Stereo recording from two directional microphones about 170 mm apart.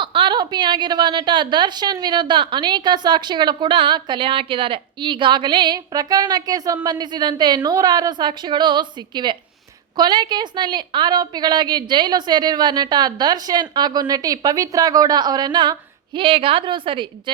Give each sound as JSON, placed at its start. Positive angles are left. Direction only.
{"t": 0.0, "sound": "a woman's voice", "side_deg": -30}